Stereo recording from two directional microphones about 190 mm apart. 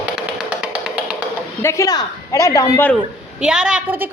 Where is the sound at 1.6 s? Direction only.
15° left (ahead or behind).